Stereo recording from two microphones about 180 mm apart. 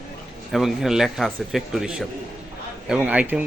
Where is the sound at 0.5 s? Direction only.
Centre (ahead or behind).